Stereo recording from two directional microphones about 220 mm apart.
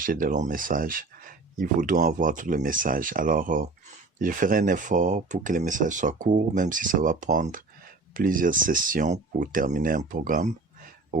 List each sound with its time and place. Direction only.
0.0 s speech: 40° right (ahead or behind)